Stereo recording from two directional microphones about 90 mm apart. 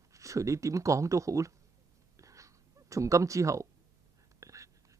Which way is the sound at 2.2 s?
35° right (ahead or behind).